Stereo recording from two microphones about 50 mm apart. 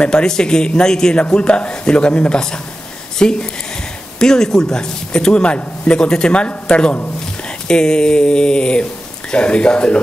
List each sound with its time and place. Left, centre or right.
0.0 s a man's voice: centre